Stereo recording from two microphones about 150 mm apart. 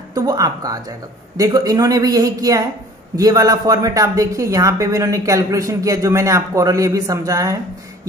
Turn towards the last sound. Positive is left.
turn(degrees=-20)  # may be behind; listen again after turning